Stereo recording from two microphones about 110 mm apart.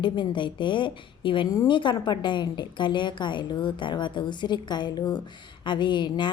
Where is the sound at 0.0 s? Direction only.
45° left (ahead or behind).